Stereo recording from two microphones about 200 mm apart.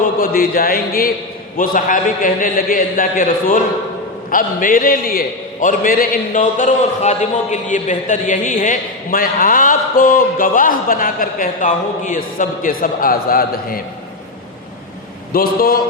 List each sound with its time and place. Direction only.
0.2 s a man's voice: 45° left (ahead or behind)
15.3 s a man's voice: 45° left (ahead or behind)